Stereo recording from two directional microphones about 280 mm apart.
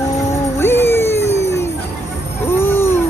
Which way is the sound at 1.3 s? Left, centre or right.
Left.